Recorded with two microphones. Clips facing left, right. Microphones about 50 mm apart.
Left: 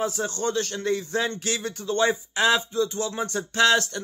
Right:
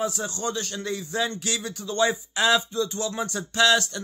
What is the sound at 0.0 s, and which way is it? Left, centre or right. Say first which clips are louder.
Speech: left 2 dB; left.